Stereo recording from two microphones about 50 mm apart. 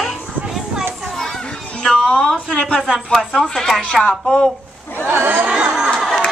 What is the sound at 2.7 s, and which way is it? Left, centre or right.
Speech, centre.